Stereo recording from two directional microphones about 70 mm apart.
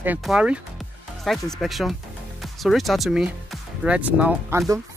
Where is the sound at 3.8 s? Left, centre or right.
Centre.